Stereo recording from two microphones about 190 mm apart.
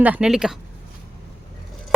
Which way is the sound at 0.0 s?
5° right (ahead or behind).